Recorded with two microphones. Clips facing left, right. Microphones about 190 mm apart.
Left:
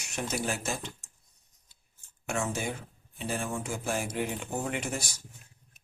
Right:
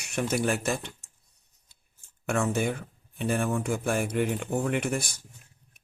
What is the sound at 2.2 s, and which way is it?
Speech, 60° right (ahead or behind).